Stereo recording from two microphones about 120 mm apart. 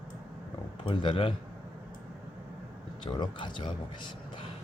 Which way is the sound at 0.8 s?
40° left (ahead or behind).